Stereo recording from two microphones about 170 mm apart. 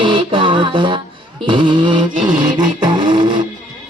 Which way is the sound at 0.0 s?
30° right (ahead or behind).